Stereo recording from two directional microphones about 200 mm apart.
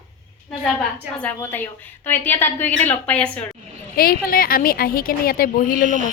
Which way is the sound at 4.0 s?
45° left (ahead or behind).